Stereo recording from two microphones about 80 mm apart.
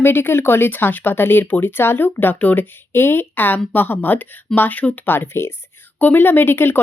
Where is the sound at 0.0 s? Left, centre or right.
Left.